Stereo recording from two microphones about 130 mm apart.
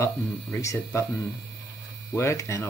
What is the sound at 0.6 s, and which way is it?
Speech, 20° left (ahead or behind).